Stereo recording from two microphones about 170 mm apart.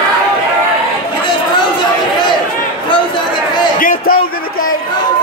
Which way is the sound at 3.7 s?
55° left (ahead or behind).